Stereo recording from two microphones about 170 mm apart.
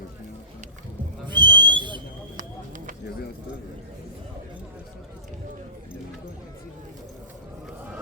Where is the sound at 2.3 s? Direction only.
50° right (ahead or behind).